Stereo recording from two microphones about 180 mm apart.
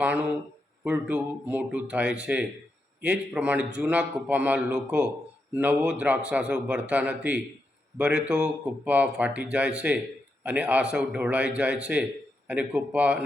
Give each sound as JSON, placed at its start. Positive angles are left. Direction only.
{"t": 0.0, "sound": "a man's voice", "side_deg": -10}